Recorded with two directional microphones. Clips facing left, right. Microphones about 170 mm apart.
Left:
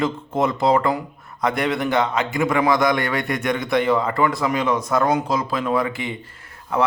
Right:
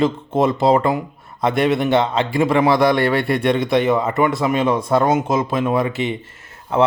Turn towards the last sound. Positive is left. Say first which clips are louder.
# right 4 dB
turn(degrees=-30)  # may be behind; listen again after turning